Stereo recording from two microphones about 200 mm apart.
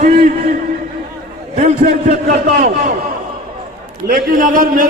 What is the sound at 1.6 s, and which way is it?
A man's voice, 35° right (ahead or behind).